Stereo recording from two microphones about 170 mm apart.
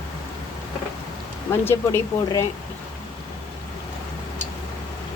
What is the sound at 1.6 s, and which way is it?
Speech, 15° left (ahead or behind).